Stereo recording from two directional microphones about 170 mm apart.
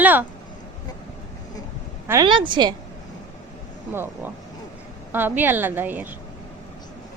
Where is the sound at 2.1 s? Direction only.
25° right (ahead or behind).